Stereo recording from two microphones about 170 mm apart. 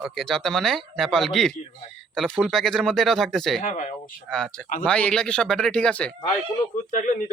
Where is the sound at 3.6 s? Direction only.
50° left (ahead or behind).